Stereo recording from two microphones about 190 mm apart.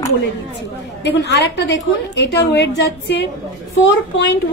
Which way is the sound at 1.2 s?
65° left (ahead or behind).